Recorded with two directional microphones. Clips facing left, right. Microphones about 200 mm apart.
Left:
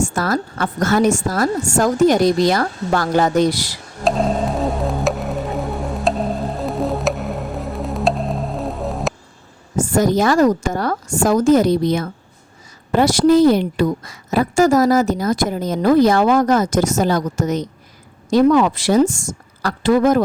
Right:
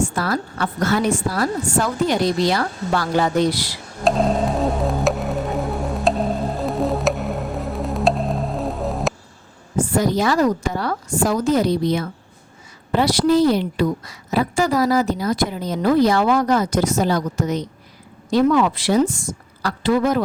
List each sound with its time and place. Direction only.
0.1 s a woman's voice: 45° left (ahead or behind)
4.0 s music: centre (ahead or behind)
9.7 s a woman's voice: 45° left (ahead or behind)